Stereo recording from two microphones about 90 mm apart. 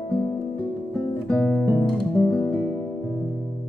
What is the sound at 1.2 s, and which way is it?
Music, 20° left (ahead or behind).